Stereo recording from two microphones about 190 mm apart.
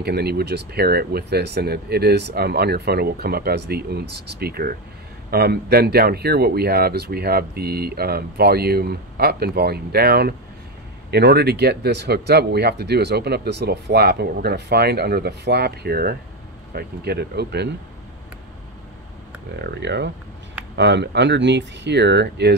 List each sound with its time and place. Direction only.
0.0 s speech: 55° right (ahead or behind)
19.5 s speech: 60° right (ahead or behind)